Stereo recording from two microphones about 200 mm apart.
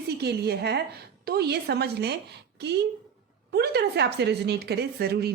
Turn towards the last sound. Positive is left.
turn(degrees=-50)  # may be behind; listen again after turning